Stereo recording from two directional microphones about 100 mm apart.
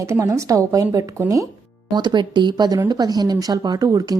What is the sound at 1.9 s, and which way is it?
Speech, 50° right (ahead or behind).